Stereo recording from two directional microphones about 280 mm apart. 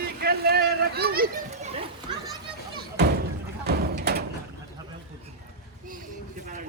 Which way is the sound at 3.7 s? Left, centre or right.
Right.